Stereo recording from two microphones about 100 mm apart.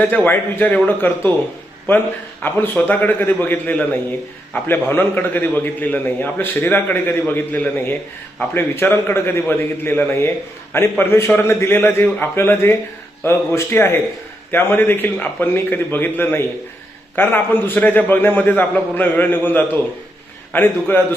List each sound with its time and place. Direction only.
0.1 s speech: 15° left (ahead or behind)
2.4 s a man's voice: 20° left (ahead or behind)